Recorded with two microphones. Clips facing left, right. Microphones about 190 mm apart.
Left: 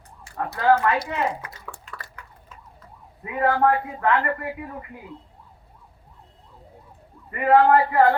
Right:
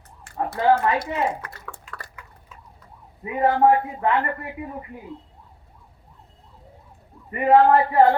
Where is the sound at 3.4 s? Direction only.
20° right (ahead or behind).